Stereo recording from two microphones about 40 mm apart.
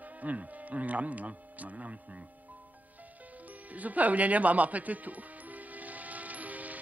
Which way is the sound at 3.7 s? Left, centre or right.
Right.